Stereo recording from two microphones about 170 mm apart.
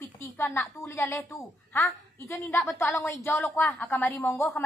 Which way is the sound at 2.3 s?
Centre (ahead or behind).